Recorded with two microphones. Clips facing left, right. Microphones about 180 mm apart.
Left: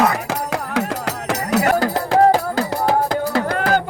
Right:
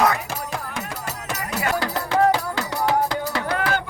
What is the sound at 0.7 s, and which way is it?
Music, 90° left.